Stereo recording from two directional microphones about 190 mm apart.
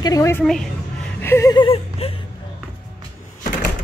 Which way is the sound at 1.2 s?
15° left (ahead or behind).